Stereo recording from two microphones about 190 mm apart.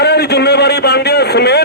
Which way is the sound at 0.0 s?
60° left (ahead or behind).